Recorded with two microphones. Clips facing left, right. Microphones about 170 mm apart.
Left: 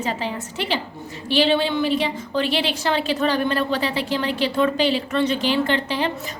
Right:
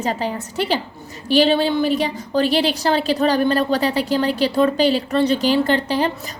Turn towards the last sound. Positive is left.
turn(degrees=-40)  # may be behind; listen again after turning